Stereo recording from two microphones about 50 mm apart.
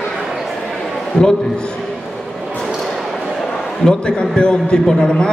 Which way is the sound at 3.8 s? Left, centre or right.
Centre.